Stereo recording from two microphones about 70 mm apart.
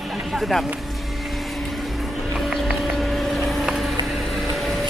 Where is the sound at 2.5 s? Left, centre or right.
Centre.